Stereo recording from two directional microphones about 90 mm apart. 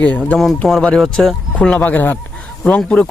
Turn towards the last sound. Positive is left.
turn(degrees=10)  # may be behind; listen again after turning